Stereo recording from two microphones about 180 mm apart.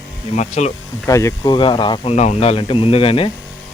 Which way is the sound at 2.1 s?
40° left (ahead or behind).